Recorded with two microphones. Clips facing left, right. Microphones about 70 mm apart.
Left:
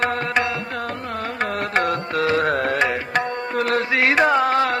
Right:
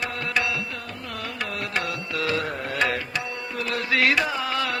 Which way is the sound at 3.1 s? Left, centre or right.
Left.